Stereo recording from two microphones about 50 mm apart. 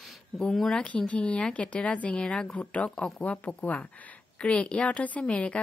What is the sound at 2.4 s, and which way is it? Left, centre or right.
Speech, left.